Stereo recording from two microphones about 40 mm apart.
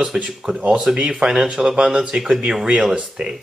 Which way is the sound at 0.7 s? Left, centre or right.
Right.